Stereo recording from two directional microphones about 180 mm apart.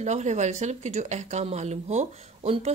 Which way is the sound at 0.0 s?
40° right (ahead or behind).